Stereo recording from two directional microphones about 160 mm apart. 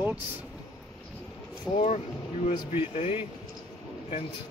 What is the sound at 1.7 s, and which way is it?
Speech, 45° left (ahead or behind).